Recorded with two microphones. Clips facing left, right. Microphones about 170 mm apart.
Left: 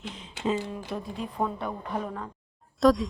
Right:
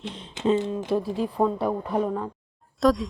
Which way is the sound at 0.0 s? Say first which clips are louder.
Right 5 dB; 25° right (ahead or behind).